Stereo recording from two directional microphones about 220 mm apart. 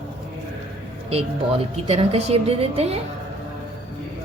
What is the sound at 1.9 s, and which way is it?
A woman's voice, 25° right (ahead or behind).